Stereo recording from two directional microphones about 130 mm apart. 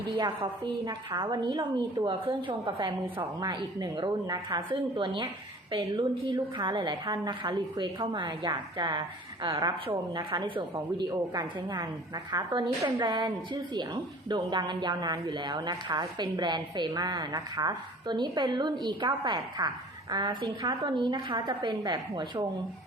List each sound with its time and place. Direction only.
0.6 s a woman's voice: 35° right (ahead or behind)